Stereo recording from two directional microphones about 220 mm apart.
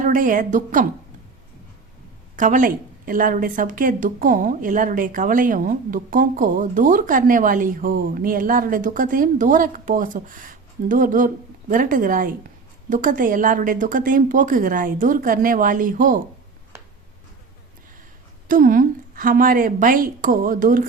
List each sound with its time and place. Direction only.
0.1 s a woman's voice: 35° right (ahead or behind)
2.3 s a woman's voice: 35° right (ahead or behind)
18.4 s a woman's voice: 40° right (ahead or behind)